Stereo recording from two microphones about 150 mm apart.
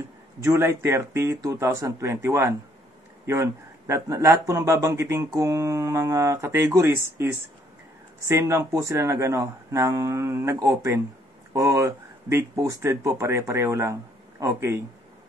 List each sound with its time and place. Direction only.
0.4 s speech: 15° right (ahead or behind)